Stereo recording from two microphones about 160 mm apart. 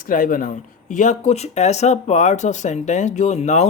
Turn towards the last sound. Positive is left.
turn(degrees=45)  # may be behind; listen again after turning